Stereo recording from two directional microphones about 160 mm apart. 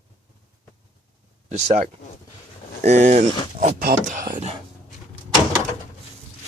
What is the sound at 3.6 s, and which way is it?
Speech, 65° right (ahead or behind).